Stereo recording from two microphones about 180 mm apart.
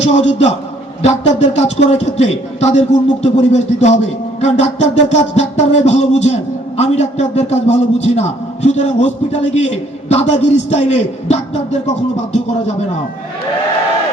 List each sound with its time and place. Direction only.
0.0 s a man's voice: 40° left (ahead or behind)